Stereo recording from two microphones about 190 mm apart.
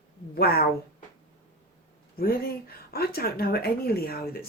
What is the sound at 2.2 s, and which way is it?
Speech, 50° left (ahead or behind).